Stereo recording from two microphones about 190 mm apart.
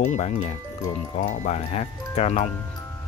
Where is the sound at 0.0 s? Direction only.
35° left (ahead or behind).